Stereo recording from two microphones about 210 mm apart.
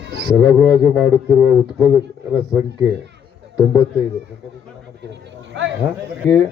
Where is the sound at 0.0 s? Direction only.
50° right (ahead or behind).